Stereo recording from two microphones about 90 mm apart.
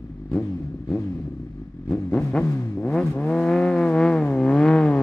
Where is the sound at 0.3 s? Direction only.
15° left (ahead or behind).